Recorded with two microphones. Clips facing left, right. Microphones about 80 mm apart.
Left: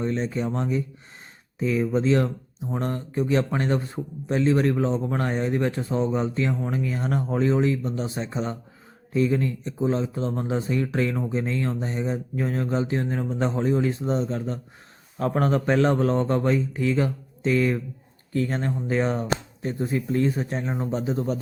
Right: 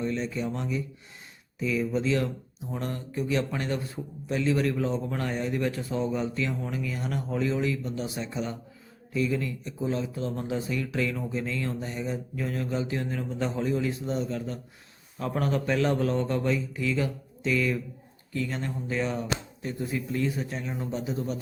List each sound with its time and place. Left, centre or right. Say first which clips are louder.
0.0 s speech: left 4 dB; left